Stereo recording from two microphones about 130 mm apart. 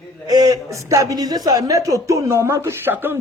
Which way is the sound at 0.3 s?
30° right (ahead or behind).